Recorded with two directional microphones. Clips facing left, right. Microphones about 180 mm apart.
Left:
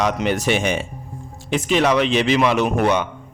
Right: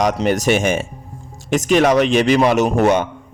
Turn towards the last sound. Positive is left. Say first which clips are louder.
# right 3 dB
turn(degrees=-45)  # may be behind; listen again after turning